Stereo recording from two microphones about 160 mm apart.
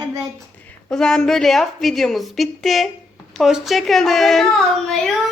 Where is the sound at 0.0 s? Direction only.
20° right (ahead or behind).